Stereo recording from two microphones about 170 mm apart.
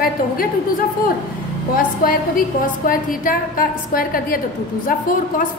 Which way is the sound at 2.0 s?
55° left (ahead or behind).